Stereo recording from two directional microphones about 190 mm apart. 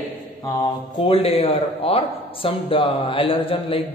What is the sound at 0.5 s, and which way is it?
A man's voice, 30° left (ahead or behind).